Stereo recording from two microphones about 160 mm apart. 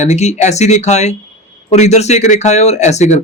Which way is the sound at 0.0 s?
45° left (ahead or behind).